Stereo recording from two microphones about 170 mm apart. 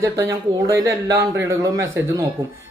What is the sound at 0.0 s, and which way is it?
A man's voice, 15° right (ahead or behind).